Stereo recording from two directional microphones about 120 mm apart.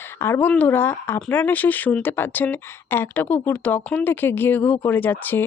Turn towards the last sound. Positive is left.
turn(degrees=15)  # may be behind; listen again after turning